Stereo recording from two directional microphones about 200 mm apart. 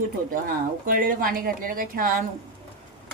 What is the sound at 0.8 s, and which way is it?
Speech, 45° right (ahead or behind).